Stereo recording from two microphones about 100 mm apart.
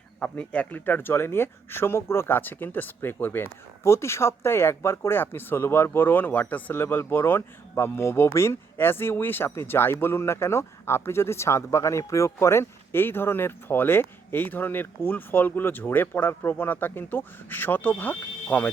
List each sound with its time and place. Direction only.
0.2 s speech: 10° left (ahead or behind)